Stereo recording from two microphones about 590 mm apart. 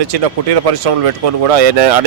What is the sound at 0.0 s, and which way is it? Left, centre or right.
A man's voice, right.